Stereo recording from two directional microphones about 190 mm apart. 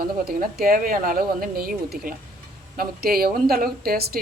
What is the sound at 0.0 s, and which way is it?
A woman's voice, 55° right (ahead or behind).